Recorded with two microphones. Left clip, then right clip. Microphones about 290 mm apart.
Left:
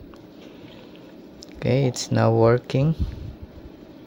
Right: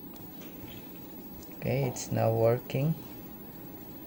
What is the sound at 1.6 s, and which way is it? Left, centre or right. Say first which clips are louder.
Speech: left 9 dB; left.